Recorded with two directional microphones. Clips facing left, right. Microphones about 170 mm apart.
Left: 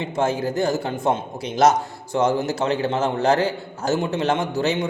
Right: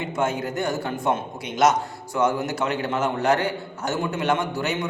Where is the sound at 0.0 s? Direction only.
30° left (ahead or behind).